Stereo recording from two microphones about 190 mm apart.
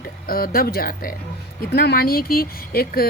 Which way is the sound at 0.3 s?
50° left (ahead or behind).